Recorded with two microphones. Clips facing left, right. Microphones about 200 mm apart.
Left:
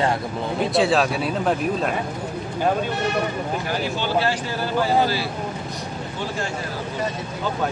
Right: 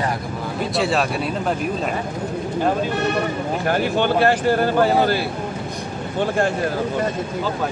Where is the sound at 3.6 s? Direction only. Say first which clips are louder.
Right 6 dB; 55° right (ahead or behind).